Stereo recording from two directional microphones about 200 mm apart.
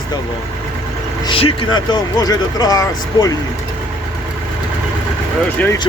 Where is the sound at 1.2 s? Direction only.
25° left (ahead or behind).